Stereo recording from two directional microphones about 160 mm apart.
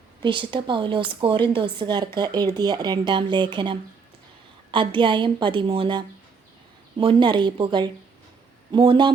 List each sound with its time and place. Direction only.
0.2 s a woman's voice: 30° right (ahead or behind)